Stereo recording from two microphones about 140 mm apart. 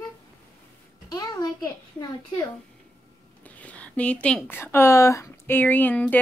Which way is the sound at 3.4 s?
10° left (ahead or behind).